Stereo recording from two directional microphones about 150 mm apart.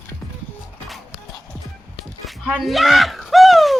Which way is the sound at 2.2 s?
Centre (ahead or behind).